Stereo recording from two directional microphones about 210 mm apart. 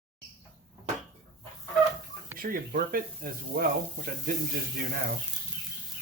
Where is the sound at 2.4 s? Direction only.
45° right (ahead or behind).